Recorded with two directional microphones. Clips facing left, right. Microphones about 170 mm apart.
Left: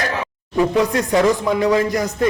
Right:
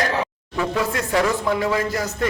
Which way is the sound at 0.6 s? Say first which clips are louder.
Left 6 dB; 20° left (ahead or behind).